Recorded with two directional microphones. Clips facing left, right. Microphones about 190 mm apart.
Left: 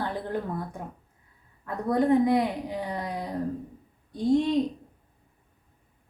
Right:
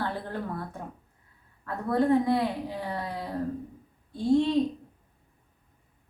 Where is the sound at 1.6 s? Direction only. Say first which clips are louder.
Left 1 dB; 15° left (ahead or behind).